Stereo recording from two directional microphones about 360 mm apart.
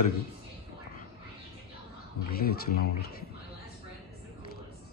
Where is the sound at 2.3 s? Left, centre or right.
Left.